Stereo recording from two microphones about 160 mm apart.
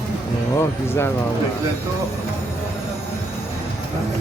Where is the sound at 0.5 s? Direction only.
15° left (ahead or behind).